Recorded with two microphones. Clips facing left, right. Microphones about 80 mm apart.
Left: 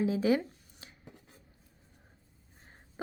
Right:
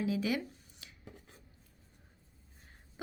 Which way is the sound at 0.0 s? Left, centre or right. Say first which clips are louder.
Left 6 dB; left.